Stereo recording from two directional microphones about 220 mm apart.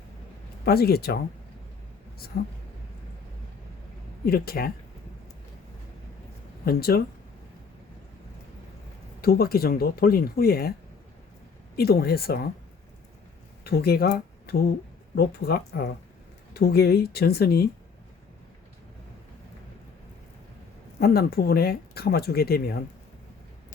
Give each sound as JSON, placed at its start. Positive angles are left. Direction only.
{"t": 0.6, "sound": "speech", "side_deg": 45}
{"t": 2.3, "sound": "speech", "side_deg": 45}
{"t": 4.3, "sound": "speech", "side_deg": 45}
{"t": 6.7, "sound": "speech", "side_deg": 45}
{"t": 9.2, "sound": "speech", "side_deg": 45}
{"t": 11.8, "sound": "speech", "side_deg": 45}
{"t": 13.7, "sound": "speech", "side_deg": 45}
{"t": 21.0, "sound": "speech", "side_deg": 45}